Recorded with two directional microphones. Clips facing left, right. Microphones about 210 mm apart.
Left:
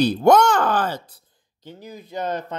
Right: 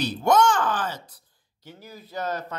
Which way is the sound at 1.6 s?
15° left (ahead or behind).